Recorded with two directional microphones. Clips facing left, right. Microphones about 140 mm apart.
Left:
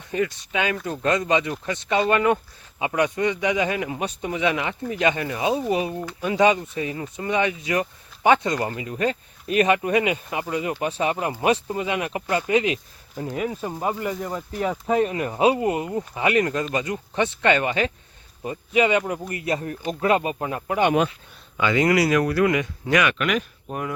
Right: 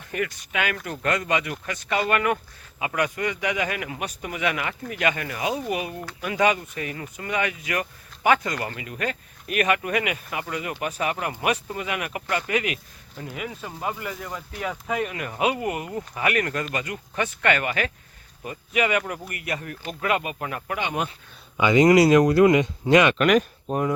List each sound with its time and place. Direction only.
0.1 s speech: 20° left (ahead or behind)
21.6 s speech: 20° right (ahead or behind)
23.2 s speech: 45° right (ahead or behind)
23.6 s speech: 25° right (ahead or behind)